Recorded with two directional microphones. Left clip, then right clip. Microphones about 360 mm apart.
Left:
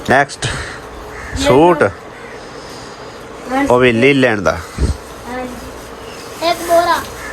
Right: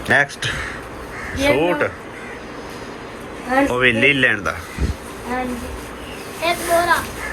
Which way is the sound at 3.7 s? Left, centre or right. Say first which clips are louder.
Left 7 dB; centre.